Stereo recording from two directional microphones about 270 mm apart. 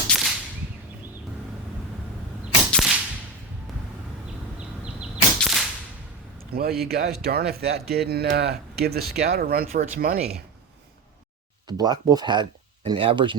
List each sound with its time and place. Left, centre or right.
0.1 s whip: centre
2.7 s whip: centre
4.9 s a sound: centre
6.5 s speech: right
11.8 s speech: centre